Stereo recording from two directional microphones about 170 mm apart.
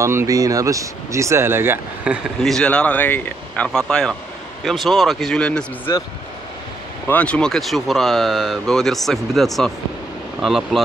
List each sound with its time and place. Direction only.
0.0 s speech: 15° right (ahead or behind)
2.4 s speech: 5° left (ahead or behind)
5.9 s speech: 20° left (ahead or behind)
7.1 s speech: 10° left (ahead or behind)